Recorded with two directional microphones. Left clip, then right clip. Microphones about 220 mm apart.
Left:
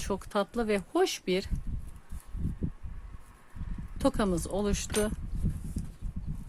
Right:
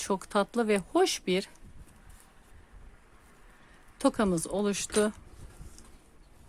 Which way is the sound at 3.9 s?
10° right (ahead or behind).